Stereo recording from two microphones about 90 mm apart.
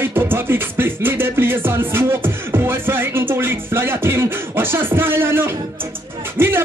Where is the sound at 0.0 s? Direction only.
25° right (ahead or behind).